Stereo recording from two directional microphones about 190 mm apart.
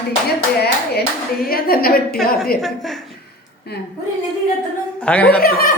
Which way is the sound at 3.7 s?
60° left (ahead or behind).